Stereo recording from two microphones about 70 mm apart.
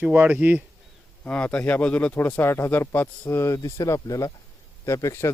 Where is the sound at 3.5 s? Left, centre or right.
Left.